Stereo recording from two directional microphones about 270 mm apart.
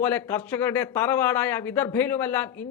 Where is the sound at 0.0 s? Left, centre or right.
Centre.